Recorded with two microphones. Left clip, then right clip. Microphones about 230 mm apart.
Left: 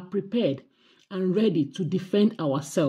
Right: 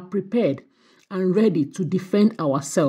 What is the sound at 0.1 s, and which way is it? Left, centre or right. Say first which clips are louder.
Speech: right 4 dB; right.